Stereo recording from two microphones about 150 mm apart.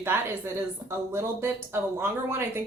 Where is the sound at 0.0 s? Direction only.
15° right (ahead or behind).